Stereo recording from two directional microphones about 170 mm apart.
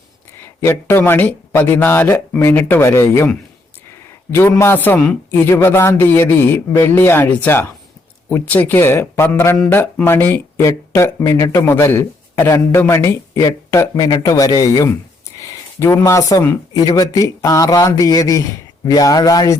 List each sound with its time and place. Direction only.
0.3 s speech: 15° left (ahead or behind)
4.3 s speech: 15° left (ahead or behind)